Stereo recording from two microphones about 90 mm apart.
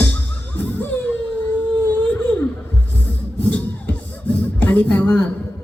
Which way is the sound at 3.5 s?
15° left (ahead or behind).